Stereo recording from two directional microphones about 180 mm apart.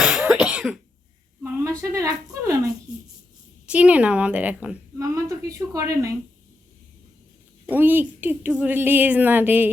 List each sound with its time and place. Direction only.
0.0 s cough: 5° right (ahead or behind)
1.4 s a woman's voice: 10° right (ahead or behind)
3.7 s a woman's voice: 5° right (ahead or behind)
7.7 s a woman's voice: 10° right (ahead or behind)